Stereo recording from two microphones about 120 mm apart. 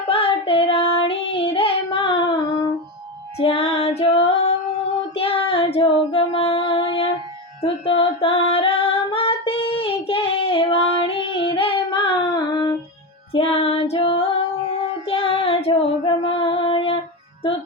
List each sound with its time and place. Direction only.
0.1 s child singing: 50° left (ahead or behind)
3.3 s female singing: 55° left (ahead or behind); by 12.7 s 35° left (ahead or behind)
13.3 s music: 55° left (ahead or behind)